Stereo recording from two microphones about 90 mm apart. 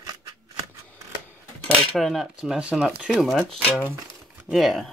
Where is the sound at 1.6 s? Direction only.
Centre (ahead or behind).